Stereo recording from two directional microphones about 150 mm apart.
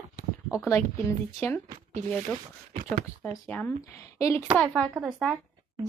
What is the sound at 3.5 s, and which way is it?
Speech, 10° left (ahead or behind).